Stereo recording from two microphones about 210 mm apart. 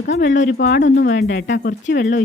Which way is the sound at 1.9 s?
35° left (ahead or behind).